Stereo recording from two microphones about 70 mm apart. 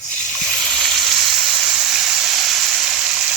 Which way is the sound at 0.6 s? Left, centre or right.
Centre.